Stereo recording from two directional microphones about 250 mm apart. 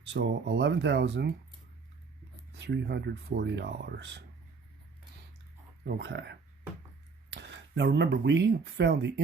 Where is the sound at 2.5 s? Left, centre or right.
Right.